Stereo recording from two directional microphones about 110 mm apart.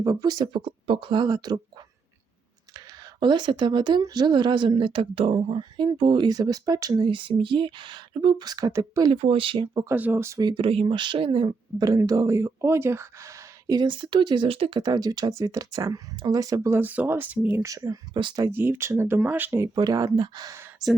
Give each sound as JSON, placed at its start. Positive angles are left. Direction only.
{"t": 0.0, "sound": "speech", "side_deg": -35}
{"t": 0.4, "sound": "a woman's voice", "side_deg": -50}
{"t": 2.7, "sound": "a woman's voice", "side_deg": -45}
{"t": 9.1, "sound": "speech", "side_deg": -55}
{"t": 9.9, "sound": "speech", "side_deg": -15}
{"t": 10.4, "sound": "a woman's voice", "side_deg": -50}
{"t": 11.8, "sound": "speech", "side_deg": -35}
{"t": 14.8, "sound": "speech", "side_deg": -35}
{"t": 16.7, "sound": "speech", "side_deg": -15}
{"t": 17.6, "sound": "speech", "side_deg": -30}
{"t": 18.3, "sound": "speech", "side_deg": -20}
{"t": 19.7, "sound": "speech", "side_deg": -35}